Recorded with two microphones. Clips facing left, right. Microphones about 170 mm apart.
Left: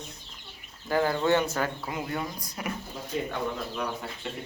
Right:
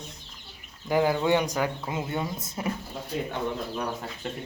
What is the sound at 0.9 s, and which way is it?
Speech, 15° right (ahead or behind).